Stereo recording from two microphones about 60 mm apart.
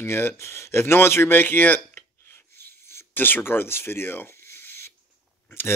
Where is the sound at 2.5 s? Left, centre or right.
Left.